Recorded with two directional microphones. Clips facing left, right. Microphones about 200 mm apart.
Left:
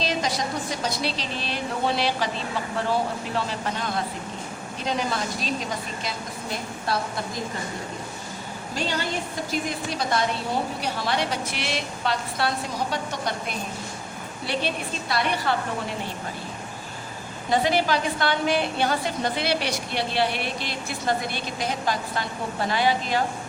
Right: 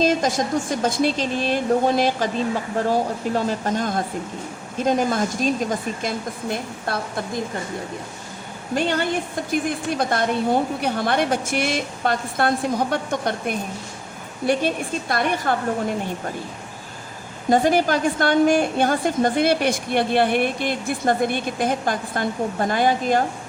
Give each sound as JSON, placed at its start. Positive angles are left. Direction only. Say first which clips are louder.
{"t": 0.0, "sound": "a woman's voice", "louder": "right 7 dB", "side_deg": -45}
{"t": 8.7, "sound": "a woman's voice", "louder": "right 7 dB", "side_deg": -55}
{"t": 17.5, "sound": "a woman's voice", "louder": "right 5 dB", "side_deg": -45}